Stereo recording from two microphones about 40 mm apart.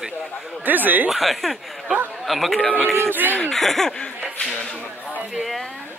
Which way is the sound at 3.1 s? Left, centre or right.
Right.